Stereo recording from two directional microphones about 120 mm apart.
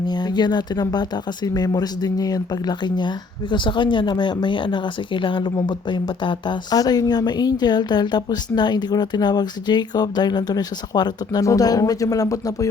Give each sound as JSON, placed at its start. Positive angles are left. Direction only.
{"t": 0.1, "sound": "speech", "side_deg": 35}